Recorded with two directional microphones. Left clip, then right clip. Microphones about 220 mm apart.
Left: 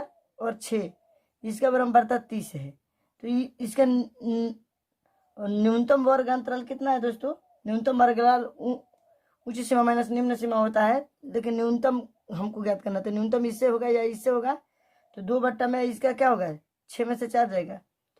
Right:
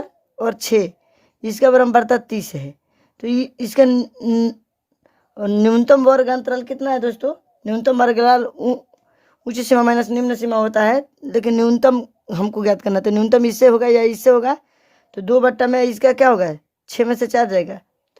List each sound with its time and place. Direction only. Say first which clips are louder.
0.3 s speech: right 12 dB; 45° right (ahead or behind)